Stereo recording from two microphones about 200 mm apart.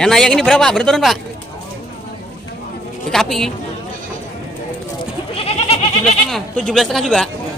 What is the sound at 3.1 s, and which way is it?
Speech, centre (ahead or behind).